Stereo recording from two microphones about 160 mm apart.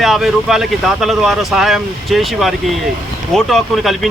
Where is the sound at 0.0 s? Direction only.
Centre (ahead or behind).